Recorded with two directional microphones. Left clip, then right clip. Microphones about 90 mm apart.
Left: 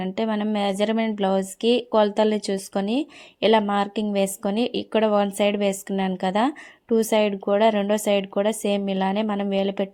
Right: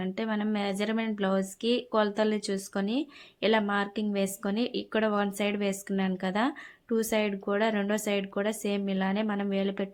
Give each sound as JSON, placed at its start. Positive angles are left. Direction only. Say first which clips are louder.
{"t": 0.0, "sound": "speech", "louder": "left 7 dB", "side_deg": 65}